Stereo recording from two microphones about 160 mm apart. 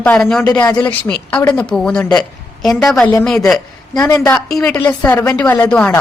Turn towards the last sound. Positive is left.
turn(degrees=5)  # may be behind; listen again after turning